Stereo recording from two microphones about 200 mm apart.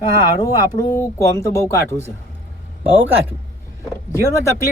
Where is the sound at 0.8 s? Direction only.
15° left (ahead or behind).